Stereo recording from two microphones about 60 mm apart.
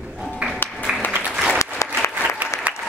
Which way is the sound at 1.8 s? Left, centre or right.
Left.